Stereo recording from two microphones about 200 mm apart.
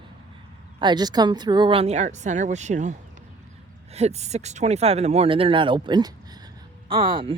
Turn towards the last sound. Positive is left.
turn(degrees=-25)  # may be behind; listen again after turning